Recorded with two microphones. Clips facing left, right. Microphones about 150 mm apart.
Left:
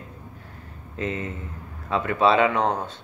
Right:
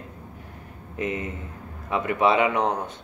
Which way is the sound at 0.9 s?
20° right (ahead or behind).